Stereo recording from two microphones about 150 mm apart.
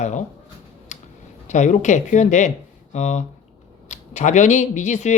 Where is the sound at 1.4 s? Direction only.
50° left (ahead or behind).